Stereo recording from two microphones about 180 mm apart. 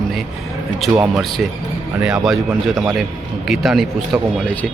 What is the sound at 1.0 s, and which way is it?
A man's voice, centre (ahead or behind).